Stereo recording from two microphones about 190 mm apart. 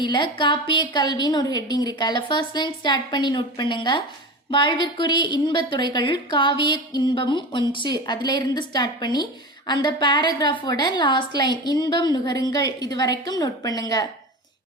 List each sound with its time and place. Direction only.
0.0 s a woman's voice: 25° left (ahead or behind)